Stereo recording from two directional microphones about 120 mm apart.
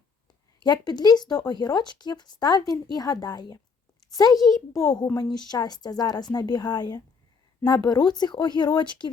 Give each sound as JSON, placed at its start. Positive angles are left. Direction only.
{"t": 0.6, "sound": "a woman's voice", "side_deg": 35}